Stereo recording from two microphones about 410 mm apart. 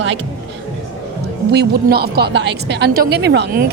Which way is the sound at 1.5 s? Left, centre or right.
Right.